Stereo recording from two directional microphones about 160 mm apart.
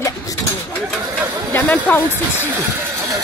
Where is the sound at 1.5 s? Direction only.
10° left (ahead or behind).